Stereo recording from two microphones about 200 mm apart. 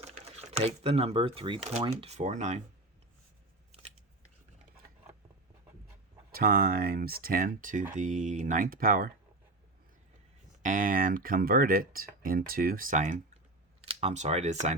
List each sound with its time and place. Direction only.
0.1 s speech: 35° right (ahead or behind)
6.3 s speech: 50° right (ahead or behind)
10.6 s speech: 40° right (ahead or behind)